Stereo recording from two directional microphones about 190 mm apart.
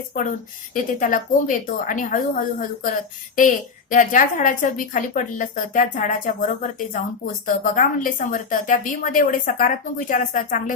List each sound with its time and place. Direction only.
0.1 s a woman's voice: 45° left (ahead or behind)